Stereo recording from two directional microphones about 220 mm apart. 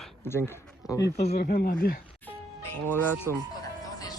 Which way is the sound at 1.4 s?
45° left (ahead or behind).